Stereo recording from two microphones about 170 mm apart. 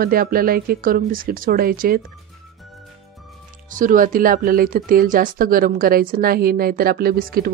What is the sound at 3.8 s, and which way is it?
Speech, 55° right (ahead or behind).